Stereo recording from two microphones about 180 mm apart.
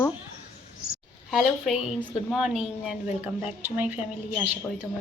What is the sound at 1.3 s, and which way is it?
A woman's voice, centre (ahead or behind).